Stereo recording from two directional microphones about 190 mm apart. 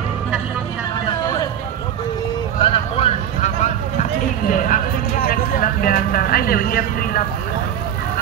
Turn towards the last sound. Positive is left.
turn(degrees=50)  # may be behind; listen again after turning